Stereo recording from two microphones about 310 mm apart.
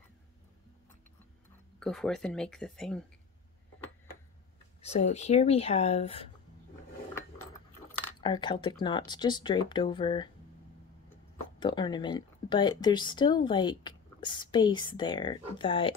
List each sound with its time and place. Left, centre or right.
1.8 s speech: centre
4.8 s speech: left
8.2 s speech: centre
11.6 s speech: centre